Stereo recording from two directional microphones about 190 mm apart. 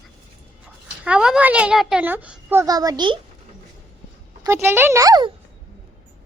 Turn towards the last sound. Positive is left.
turn(degrees=-20)  # may be behind; listen again after turning